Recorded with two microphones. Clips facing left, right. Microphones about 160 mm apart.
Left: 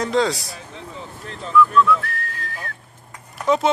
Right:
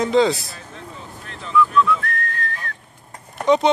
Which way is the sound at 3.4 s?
Centre (ahead or behind).